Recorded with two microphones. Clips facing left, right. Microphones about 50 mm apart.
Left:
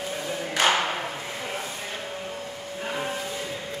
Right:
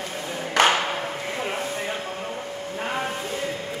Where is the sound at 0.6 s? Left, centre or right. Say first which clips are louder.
Right 4 dB; right.